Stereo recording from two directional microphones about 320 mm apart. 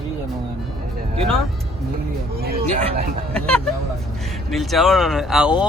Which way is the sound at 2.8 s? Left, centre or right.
Centre.